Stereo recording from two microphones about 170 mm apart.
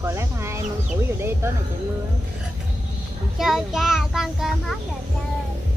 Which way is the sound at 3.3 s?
Centre (ahead or behind).